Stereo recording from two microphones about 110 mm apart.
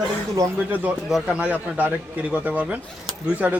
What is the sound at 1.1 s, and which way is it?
Speech, 10° right (ahead or behind).